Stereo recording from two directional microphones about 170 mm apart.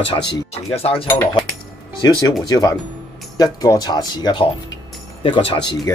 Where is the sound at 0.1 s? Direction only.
25° left (ahead or behind).